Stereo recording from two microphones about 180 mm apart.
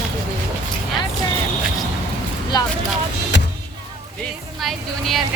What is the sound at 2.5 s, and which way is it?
Speech, 20° left (ahead or behind).